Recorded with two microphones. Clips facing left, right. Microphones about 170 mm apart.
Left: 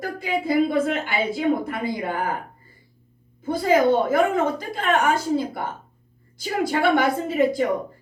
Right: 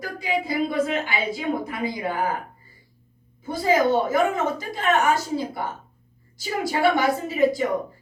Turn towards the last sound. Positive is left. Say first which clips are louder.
# even
turn(degrees=55)  # may be behind; listen again after turning